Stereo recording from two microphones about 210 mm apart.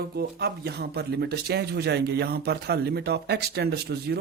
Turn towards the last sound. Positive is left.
turn(degrees=-50)  # may be behind; listen again after turning